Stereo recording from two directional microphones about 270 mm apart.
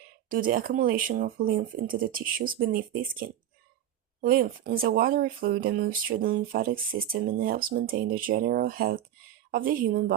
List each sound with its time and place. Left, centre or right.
0.3 s speech: right